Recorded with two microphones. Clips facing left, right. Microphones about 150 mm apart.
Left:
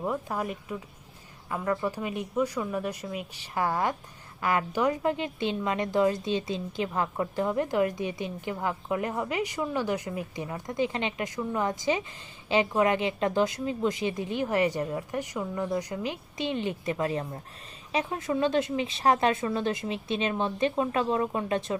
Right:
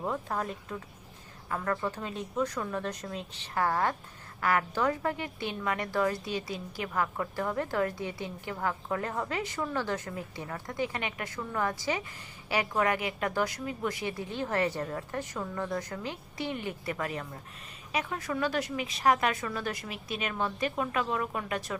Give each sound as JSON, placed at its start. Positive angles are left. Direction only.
{"t": 0.0, "sound": "a woman's voice", "side_deg": 10}